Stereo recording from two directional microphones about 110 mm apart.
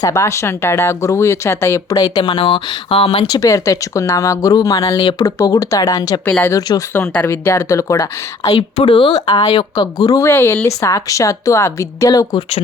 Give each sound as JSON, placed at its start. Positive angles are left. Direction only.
{"t": 0.0, "sound": "speech", "side_deg": 25}
{"t": 2.4, "sound": "speech", "side_deg": 55}
{"t": 3.2, "sound": "a woman's voice", "side_deg": 35}
{"t": 4.9, "sound": "speech", "side_deg": 55}
{"t": 5.2, "sound": "a woman's voice", "side_deg": 35}
{"t": 6.2, "sound": "speech", "side_deg": 20}
{"t": 6.6, "sound": "a woman's voice", "side_deg": 35}
{"t": 6.9, "sound": "speech", "side_deg": 15}
{"t": 8.8, "sound": "a woman's voice", "side_deg": 50}
{"t": 10.2, "sound": "a woman's voice", "side_deg": 20}